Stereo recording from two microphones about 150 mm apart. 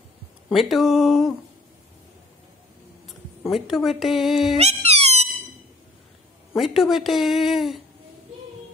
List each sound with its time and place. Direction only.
0.5 s speech: centre (ahead or behind)
3.1 s speech: centre (ahead or behind)
4.6 s cat: 45° right (ahead or behind)
6.5 s speech: centre (ahead or behind)